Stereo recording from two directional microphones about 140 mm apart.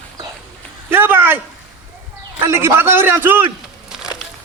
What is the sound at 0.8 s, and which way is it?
Speech, 15° right (ahead or behind).